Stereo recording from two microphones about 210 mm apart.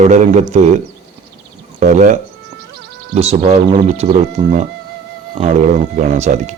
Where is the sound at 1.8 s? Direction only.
35° right (ahead or behind).